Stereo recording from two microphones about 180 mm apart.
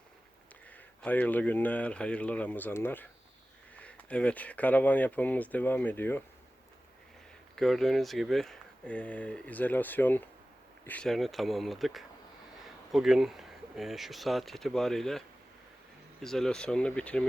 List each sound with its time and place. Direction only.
0.7 s speech: 10° left (ahead or behind)
7.5 s speech: centre (ahead or behind)
16.2 s speech: centre (ahead or behind)